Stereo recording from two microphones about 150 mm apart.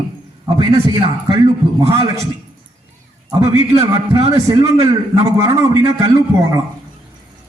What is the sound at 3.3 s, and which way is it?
A man's voice, 20° right (ahead or behind).